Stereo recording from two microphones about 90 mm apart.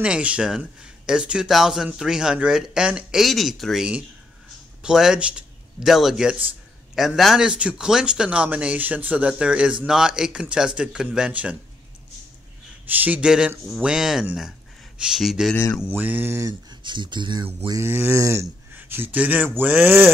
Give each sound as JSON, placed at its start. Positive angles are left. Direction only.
{"t": 0.0, "sound": "a man's voice", "side_deg": -10}
{"t": 12.8, "sound": "a man's voice", "side_deg": -20}
{"t": 15.9, "sound": "speech", "side_deg": -20}
{"t": 16.8, "sound": "speech", "side_deg": -60}
{"t": 17.7, "sound": "a sound", "side_deg": -25}
{"t": 18.8, "sound": "speech", "side_deg": -25}